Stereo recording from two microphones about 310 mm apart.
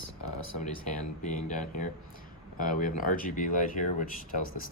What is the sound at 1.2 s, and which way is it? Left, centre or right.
Speech, left.